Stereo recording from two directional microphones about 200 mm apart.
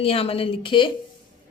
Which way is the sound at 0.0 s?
30° left (ahead or behind).